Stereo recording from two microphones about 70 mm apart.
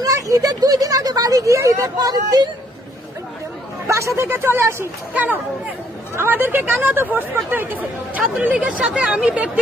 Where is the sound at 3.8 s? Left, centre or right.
Right.